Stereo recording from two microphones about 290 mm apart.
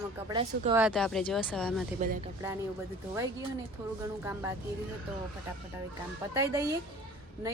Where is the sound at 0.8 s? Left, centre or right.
Centre.